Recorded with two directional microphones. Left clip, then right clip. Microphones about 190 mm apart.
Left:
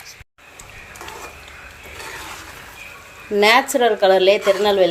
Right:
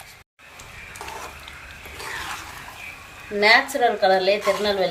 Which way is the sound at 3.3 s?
40° left (ahead or behind).